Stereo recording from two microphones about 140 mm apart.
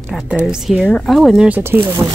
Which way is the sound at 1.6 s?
15° right (ahead or behind).